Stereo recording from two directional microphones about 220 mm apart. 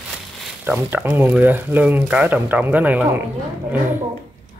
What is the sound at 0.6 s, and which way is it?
Speech, 10° right (ahead or behind).